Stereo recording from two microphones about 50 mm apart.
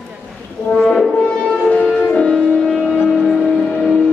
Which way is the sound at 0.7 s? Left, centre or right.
Centre.